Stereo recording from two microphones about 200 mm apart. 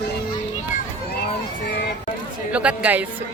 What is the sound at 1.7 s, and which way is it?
Speech, 55° left (ahead or behind).